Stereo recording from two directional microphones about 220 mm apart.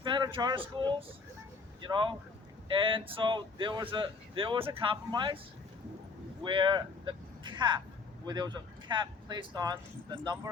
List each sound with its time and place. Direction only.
0.0 s speech: 20° right (ahead or behind)
6.4 s speech: 20° right (ahead or behind)